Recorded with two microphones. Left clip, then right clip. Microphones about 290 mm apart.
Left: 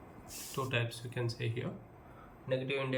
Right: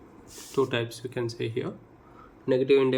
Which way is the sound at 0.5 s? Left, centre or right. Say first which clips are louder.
Right 9 dB; centre.